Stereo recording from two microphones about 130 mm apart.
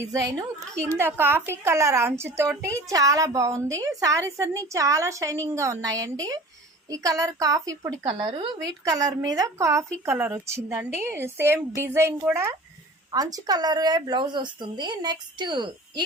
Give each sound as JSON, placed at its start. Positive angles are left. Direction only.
{"t": 0.0, "sound": "a woman's voice", "side_deg": -25}
{"t": 8.0, "sound": "speech", "side_deg": -45}
{"t": 8.8, "sound": "a woman's voice", "side_deg": -25}